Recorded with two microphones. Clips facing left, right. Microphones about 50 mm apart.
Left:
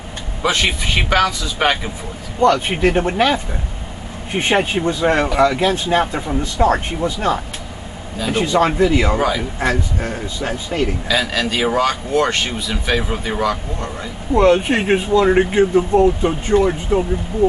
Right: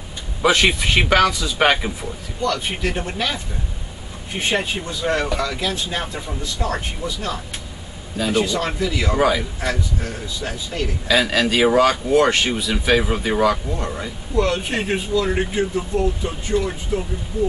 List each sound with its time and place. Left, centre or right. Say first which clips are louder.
0.4 s speech: right 2 dB; centre
2.4 s speech: left 8 dB; left
4.4 s speech: left 5 dB; left
11.1 s speech: right 1 dB; centre
14.3 s speech: left 7 dB; left